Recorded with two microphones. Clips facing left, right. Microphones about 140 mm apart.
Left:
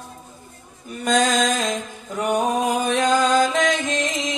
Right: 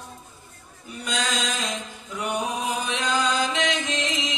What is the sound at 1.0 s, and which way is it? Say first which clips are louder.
Mantra: left 9 dB; 50° left (ahead or behind).